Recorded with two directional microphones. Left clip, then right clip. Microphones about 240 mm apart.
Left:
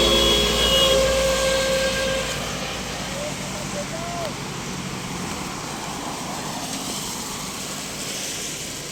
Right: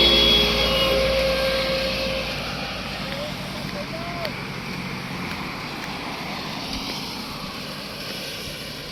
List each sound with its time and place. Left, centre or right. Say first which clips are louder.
0.0 s vehicle: right 2 dB; left